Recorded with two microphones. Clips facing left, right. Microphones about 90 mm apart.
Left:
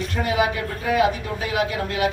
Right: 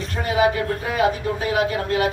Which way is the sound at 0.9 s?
35° right (ahead or behind).